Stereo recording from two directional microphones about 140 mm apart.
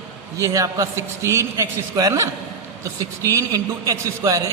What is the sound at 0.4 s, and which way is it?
A man's voice, 25° right (ahead or behind).